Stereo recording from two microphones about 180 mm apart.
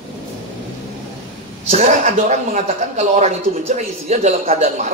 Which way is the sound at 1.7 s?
40° right (ahead or behind).